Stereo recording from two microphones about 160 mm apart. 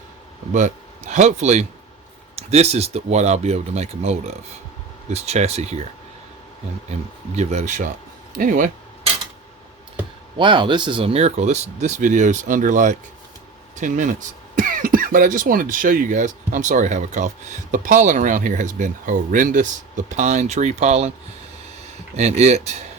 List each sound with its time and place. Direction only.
0.5 s speech: 50° right (ahead or behind)
7.3 s speech: 45° right (ahead or behind)
8.4 s speech: 55° right (ahead or behind)
10.3 s speech: 30° right (ahead or behind)
22.1 s speech: 45° right (ahead or behind)